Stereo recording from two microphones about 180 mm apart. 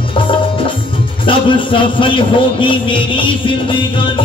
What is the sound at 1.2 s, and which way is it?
Music, 30° left (ahead or behind).